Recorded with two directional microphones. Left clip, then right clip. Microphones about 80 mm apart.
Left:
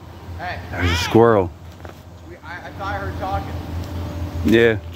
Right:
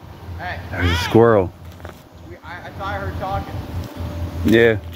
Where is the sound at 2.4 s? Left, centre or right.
Centre.